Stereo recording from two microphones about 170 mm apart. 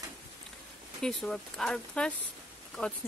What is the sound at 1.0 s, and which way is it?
Speech, 5° left (ahead or behind).